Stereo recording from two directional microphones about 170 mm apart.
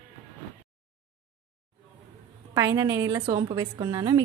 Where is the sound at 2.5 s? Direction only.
20° right (ahead or behind).